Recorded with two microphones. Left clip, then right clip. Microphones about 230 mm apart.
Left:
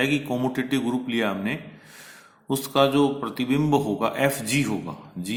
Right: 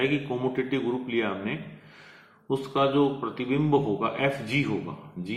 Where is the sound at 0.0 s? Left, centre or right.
Left.